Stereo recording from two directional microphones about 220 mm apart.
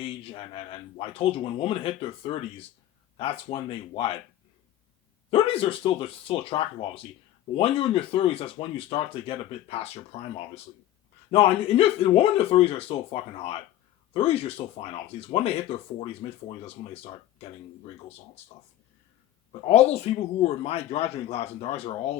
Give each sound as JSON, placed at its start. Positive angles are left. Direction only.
{"t": 0.0, "sound": "speech", "side_deg": 25}
{"t": 5.3, "sound": "speech", "side_deg": 25}
{"t": 19.6, "sound": "speech", "side_deg": 30}